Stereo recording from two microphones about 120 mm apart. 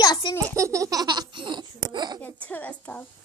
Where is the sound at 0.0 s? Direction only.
35° left (ahead or behind).